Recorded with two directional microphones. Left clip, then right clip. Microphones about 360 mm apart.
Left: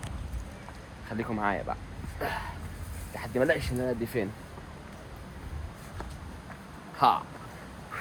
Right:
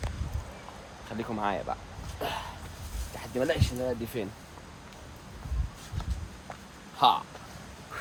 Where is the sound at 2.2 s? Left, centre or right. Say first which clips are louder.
Left 1 dB; centre.